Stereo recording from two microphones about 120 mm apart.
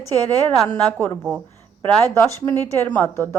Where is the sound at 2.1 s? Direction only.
20° left (ahead or behind).